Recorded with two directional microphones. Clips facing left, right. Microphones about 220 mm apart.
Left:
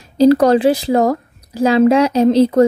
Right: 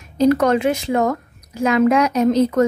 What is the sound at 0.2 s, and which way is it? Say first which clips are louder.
A woman's voice: left 5 dB; 35° left (ahead or behind).